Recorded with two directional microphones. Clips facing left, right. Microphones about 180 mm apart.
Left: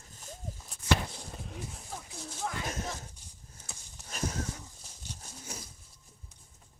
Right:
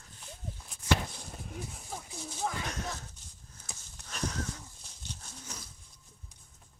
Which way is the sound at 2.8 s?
25° left (ahead or behind).